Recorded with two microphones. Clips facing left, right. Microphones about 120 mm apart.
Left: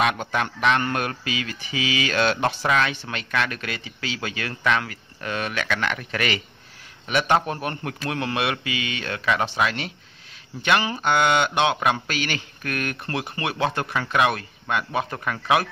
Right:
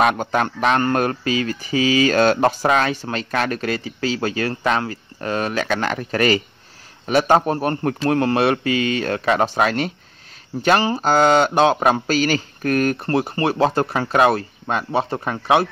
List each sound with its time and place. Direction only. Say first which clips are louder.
0.0 s speech: right 5 dB; 40° right (ahead or behind)